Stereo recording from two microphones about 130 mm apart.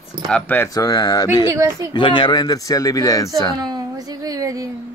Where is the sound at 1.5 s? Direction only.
25° right (ahead or behind).